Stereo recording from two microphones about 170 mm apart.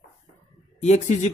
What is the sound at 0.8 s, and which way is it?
Speech, 40° left (ahead or behind).